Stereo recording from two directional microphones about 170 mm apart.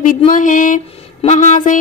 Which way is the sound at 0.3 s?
50° left (ahead or behind).